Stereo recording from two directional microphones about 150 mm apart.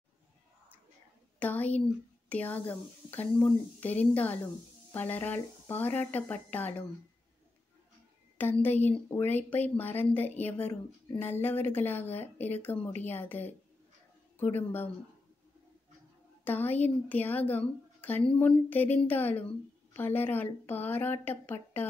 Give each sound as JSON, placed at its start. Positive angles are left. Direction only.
{"t": 1.4, "sound": "speech", "side_deg": 10}
{"t": 8.4, "sound": "speech", "side_deg": 10}
{"t": 16.4, "sound": "speech", "side_deg": 10}